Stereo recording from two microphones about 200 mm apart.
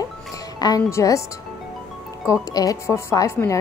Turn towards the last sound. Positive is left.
turn(degrees=15)  # may be behind; listen again after turning